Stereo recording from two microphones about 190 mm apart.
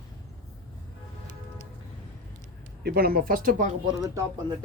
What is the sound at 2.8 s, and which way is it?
Speech, 55° right (ahead or behind).